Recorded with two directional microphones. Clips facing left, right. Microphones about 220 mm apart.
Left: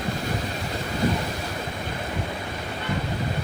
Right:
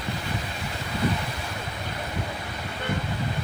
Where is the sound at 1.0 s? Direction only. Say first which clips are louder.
Left 2 dB; 45° left (ahead or behind).